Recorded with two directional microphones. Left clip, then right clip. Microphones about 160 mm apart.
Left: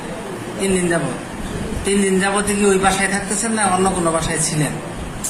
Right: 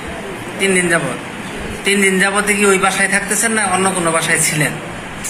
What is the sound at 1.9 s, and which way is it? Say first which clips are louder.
A man's voice: right 4 dB; centre (ahead or behind).